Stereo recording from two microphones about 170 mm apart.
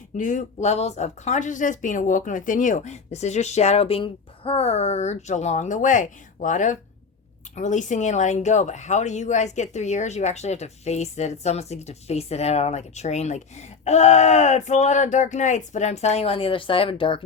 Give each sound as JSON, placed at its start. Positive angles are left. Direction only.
{"t": 0.2, "sound": "speech", "side_deg": 50}